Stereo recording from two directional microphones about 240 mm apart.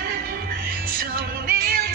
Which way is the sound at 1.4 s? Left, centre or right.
Right.